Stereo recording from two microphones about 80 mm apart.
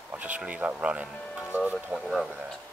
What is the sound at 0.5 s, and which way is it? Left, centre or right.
Speech, centre.